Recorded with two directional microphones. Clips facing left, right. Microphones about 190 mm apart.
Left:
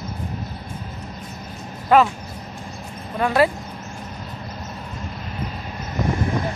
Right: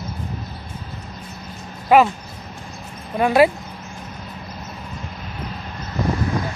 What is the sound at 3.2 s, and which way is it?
Speech, 15° right (ahead or behind).